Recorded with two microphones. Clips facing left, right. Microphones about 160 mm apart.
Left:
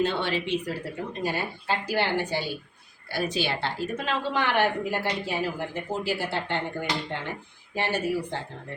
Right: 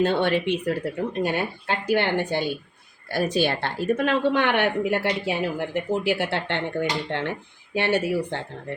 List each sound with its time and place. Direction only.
0.0 s a woman's voice: 50° right (ahead or behind); by 8.4 s 70° right (ahead or behind)